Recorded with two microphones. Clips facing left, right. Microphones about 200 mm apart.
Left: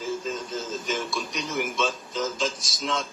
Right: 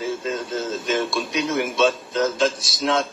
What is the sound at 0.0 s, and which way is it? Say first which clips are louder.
A man's voice: right 4 dB; 75° right (ahead or behind).